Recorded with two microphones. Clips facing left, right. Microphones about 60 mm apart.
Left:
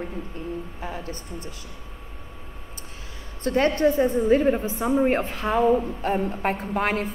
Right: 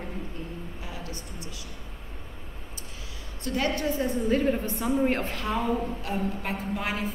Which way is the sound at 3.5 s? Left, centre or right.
Left.